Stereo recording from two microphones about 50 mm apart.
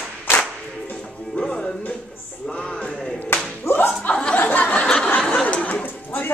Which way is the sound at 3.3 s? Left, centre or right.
Left.